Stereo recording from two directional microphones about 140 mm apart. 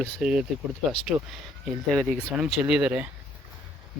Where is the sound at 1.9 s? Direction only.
Centre (ahead or behind).